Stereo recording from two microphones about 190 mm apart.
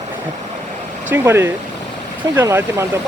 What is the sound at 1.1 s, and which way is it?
Speech, 10° right (ahead or behind).